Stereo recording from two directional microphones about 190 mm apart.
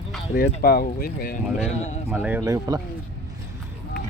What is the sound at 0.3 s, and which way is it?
Speech, 50° left (ahead or behind).